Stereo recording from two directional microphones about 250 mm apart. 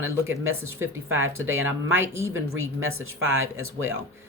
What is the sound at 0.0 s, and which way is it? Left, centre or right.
Speech, right.